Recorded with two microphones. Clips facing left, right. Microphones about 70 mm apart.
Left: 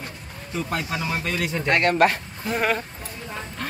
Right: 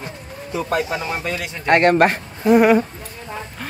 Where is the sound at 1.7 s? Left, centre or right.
Right.